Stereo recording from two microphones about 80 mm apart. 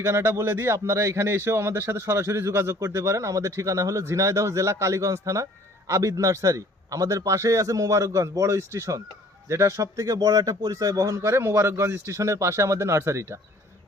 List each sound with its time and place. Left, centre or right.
0.0 s a man's voice: right